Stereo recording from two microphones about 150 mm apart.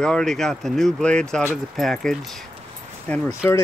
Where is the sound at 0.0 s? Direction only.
5° left (ahead or behind).